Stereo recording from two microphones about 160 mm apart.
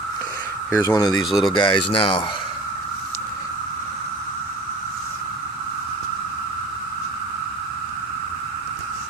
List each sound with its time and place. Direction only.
0.7 s speech: 20° left (ahead or behind)
1.1 s speech: centre (ahead or behind)
1.6 s speech: 35° left (ahead or behind)